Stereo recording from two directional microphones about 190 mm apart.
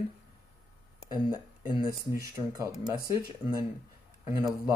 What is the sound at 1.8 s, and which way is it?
Speech, 15° right (ahead or behind).